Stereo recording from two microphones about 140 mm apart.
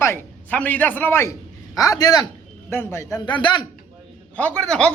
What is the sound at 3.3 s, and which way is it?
Speech, 35° left (ahead or behind).